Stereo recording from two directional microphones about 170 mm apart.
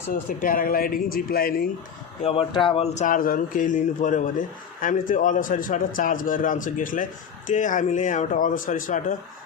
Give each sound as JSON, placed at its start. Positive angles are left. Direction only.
{"t": 0.1, "sound": "speech", "side_deg": 55}
{"t": 2.2, "sound": "speech", "side_deg": 35}